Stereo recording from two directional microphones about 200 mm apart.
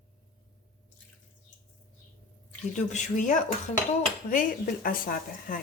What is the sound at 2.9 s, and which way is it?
A woman's voice, 40° left (ahead or behind).